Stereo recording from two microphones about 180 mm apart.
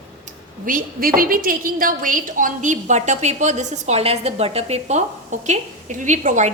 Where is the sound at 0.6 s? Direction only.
50° right (ahead or behind).